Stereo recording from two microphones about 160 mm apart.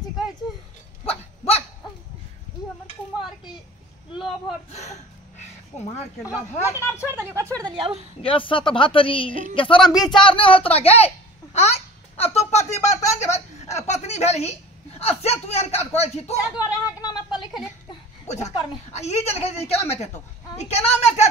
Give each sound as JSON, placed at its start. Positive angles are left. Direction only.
{"t": 1.0, "sound": "dog", "side_deg": 40}
{"t": 3.2, "sound": "a sound", "side_deg": -5}
{"t": 6.2, "sound": "speech", "side_deg": 20}
{"t": 7.1, "sound": "speech", "side_deg": -15}
{"t": 7.7, "sound": "speech", "side_deg": -35}
{"t": 8.2, "sound": "speech", "side_deg": 35}
{"t": 9.3, "sound": "a woman's voice", "side_deg": -50}
{"t": 9.6, "sound": "speech", "side_deg": 35}
{"t": 11.5, "sound": "a sound", "side_deg": 40}
{"t": 15.4, "sound": "speech", "side_deg": 40}
{"t": 16.5, "sound": "a sound", "side_deg": 25}
{"t": 18.2, "sound": "a sound", "side_deg": 45}
{"t": 18.9, "sound": "a woman's voice", "side_deg": 45}